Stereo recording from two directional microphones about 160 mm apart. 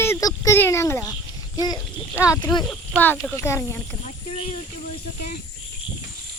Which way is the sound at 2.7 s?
10° left (ahead or behind).